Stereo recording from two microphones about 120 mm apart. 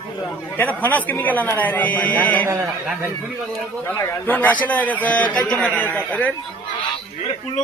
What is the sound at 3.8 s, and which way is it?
A man's voice, 15° left (ahead or behind).